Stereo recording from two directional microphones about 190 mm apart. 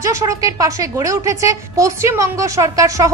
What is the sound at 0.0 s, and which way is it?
A woman's voice, 15° right (ahead or behind).